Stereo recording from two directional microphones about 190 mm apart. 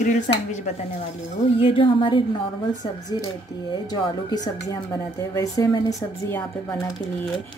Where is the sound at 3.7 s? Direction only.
20° left (ahead or behind).